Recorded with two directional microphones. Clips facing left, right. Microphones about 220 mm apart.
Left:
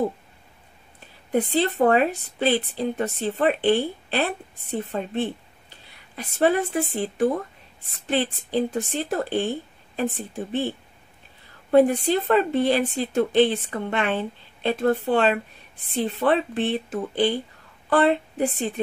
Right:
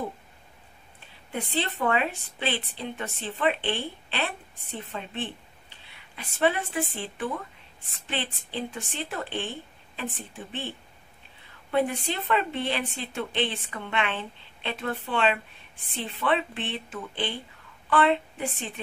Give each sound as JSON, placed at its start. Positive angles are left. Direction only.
{"t": 1.3, "sound": "speech", "side_deg": 40}
{"t": 11.7, "sound": "a woman's voice", "side_deg": 40}